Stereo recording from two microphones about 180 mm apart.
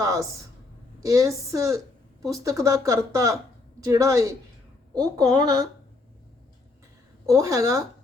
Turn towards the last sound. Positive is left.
turn(degrees=-20)  # may be behind; listen again after turning